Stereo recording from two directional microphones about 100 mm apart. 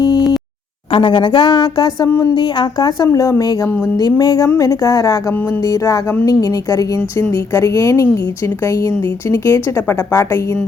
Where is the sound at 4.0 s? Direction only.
35° left (ahead or behind).